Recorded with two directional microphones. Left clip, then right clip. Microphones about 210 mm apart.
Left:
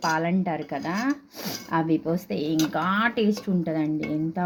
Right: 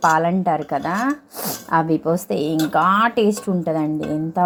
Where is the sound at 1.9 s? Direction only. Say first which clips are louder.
Right 6 dB; 20° right (ahead or behind).